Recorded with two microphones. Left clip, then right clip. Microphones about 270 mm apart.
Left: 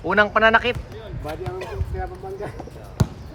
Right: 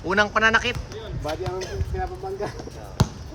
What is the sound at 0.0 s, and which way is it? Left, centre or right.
Speech, centre.